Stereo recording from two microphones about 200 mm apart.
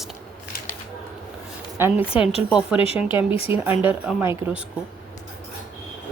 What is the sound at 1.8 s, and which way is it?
Speech, 5° right (ahead or behind).